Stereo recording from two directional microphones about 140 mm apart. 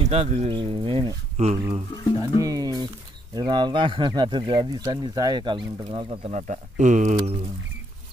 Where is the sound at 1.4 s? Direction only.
50° right (ahead or behind).